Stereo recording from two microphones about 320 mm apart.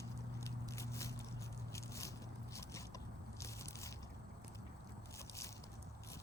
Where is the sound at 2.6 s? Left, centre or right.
Centre.